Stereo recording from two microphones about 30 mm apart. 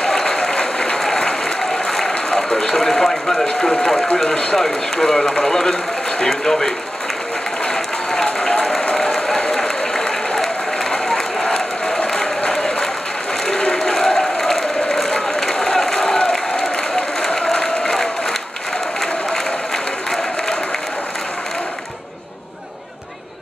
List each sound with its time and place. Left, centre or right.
0.0 s applause: centre
3.4 s a man's voice: centre
7.6 s applause: centre
10.9 s a sound: centre
11.4 s applause: left
13.9 s applause: centre
15.5 s a sound: left
16.2 s crowd: left
17.4 s applause: left
19.3 s applause: centre